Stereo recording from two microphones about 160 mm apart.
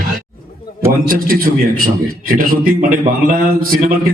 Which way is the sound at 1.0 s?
65° right (ahead or behind).